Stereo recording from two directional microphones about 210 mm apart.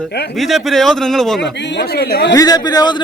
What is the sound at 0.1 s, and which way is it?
Speech, 50° left (ahead or behind).